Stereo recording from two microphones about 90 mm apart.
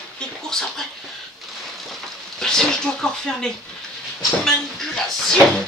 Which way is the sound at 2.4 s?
5° left (ahead or behind).